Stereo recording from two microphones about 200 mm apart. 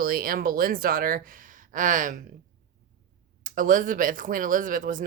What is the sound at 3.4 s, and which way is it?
Speech, 40° right (ahead or behind).